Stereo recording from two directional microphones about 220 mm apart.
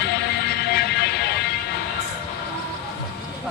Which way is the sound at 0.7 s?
45° left (ahead or behind).